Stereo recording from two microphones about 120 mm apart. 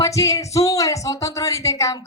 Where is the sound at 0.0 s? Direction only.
25° left (ahead or behind).